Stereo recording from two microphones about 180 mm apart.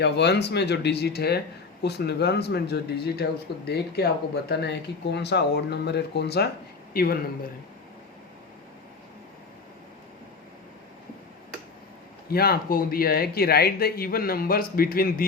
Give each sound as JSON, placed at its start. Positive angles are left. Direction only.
{"t": 0.0, "sound": "speech", "side_deg": 70}
{"t": 12.3, "sound": "speech", "side_deg": 60}